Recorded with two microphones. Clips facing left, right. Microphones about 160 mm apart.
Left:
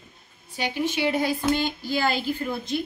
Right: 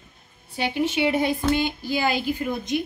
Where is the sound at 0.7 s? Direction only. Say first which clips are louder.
Right 2 dB; 25° right (ahead or behind).